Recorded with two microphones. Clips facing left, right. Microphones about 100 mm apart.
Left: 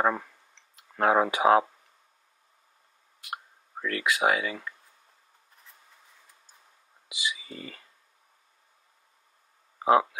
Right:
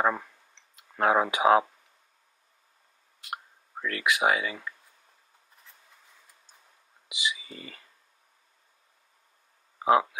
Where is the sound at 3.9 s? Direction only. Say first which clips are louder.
Even; 15° right (ahead or behind).